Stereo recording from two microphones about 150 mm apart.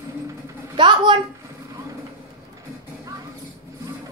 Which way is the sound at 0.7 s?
30° right (ahead or behind).